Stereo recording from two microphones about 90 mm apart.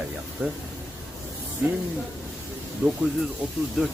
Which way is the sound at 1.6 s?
20° right (ahead or behind).